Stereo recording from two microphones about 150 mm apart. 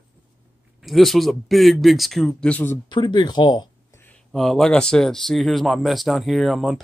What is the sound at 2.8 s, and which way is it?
Speech, 30° left (ahead or behind).